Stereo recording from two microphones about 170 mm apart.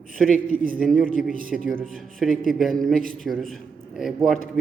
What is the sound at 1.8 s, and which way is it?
A man's voice, centre (ahead or behind).